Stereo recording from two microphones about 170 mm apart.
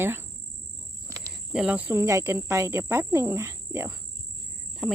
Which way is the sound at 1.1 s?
20° right (ahead or behind).